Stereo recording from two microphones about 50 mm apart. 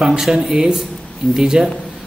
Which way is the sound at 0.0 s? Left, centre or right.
Centre.